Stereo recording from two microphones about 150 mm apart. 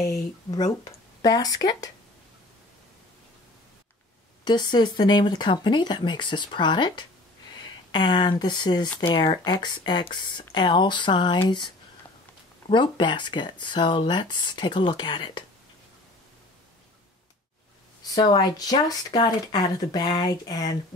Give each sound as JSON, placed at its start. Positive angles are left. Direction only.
{"t": 0.0, "sound": "speech", "side_deg": 25}
{"t": 4.5, "sound": "speech", "side_deg": 30}
{"t": 18.1, "sound": "speech", "side_deg": 25}